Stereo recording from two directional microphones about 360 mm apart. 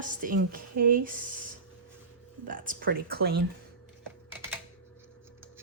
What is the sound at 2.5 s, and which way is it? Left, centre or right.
Speech, right.